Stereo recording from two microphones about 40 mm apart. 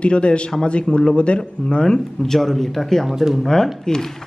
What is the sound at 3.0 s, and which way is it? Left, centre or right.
Speech, centre.